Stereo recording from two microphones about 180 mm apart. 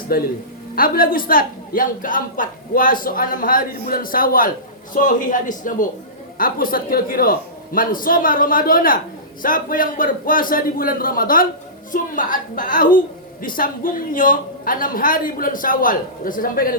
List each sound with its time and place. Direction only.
0.1 s a man's voice: 55° left (ahead or behind)